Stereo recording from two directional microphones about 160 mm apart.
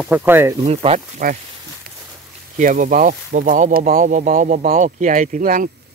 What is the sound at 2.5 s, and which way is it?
Speech, 50° right (ahead or behind).